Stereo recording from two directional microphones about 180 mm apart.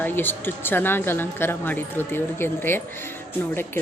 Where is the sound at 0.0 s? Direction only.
10° left (ahead or behind).